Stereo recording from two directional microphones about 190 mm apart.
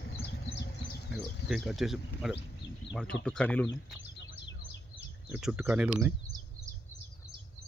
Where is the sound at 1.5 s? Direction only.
Centre (ahead or behind).